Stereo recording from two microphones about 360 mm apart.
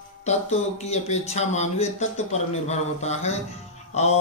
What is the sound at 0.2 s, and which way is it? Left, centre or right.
Speech, centre.